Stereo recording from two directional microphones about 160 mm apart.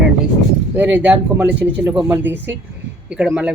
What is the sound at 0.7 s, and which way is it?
Speech, 10° right (ahead or behind).